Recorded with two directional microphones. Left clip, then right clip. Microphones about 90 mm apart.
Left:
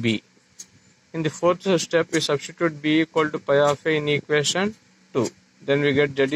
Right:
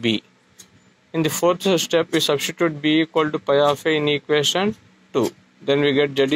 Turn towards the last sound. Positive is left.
turn(degrees=-30)  # may be behind; listen again after turning